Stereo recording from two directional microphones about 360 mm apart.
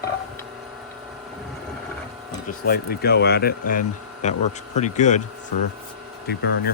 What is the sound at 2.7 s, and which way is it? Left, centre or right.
Speech, left.